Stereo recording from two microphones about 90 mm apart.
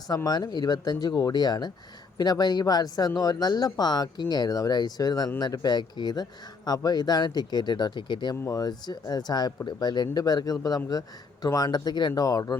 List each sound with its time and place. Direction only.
0.3 s speech: 50° left (ahead or behind)
8.4 s speech: 45° left (ahead or behind)